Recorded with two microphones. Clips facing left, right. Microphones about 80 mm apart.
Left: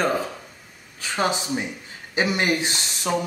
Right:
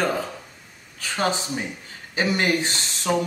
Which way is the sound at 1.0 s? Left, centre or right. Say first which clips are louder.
Even; centre.